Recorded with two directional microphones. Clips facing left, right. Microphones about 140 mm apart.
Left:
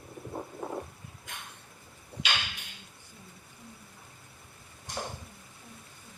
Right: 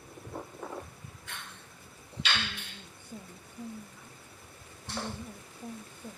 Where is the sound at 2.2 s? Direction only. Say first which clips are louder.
Even; 10° left (ahead or behind).